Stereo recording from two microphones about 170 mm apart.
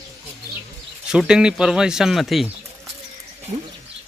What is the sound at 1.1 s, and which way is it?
Speech, 5° right (ahead or behind).